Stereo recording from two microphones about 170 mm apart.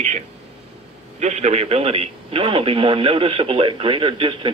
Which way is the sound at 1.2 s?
40° right (ahead or behind).